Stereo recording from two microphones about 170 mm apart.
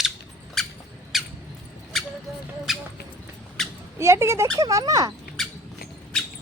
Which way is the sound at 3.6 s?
Centre (ahead or behind).